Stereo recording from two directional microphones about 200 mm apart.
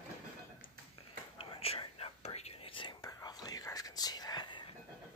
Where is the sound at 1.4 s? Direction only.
30° left (ahead or behind).